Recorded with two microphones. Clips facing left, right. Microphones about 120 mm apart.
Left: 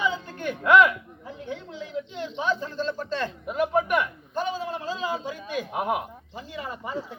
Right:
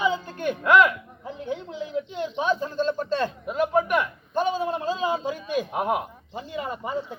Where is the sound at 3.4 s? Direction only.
5° left (ahead or behind).